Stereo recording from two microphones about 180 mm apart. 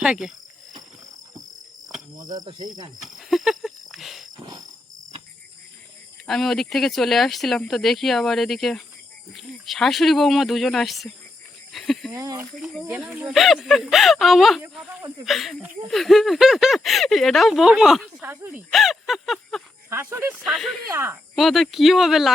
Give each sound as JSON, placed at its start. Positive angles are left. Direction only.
{"t": 0.0, "sound": "speech", "side_deg": -5}
{"t": 2.1, "sound": "cricket", "side_deg": -25}
{"t": 3.0, "sound": "insect", "side_deg": 0}
{"t": 6.2, "sound": "speech", "side_deg": 0}
{"t": 11.7, "sound": "a sound", "side_deg": 0}
{"t": 12.1, "sound": "speech", "side_deg": -15}
{"t": 12.5, "sound": "speech", "side_deg": 0}
{"t": 18.2, "sound": "speech", "side_deg": -10}
{"t": 18.7, "sound": "a sound", "side_deg": 0}
{"t": 19.9, "sound": "speech", "side_deg": -15}
{"t": 20.9, "sound": "speech", "side_deg": -15}
{"t": 21.3, "sound": "speech", "side_deg": 0}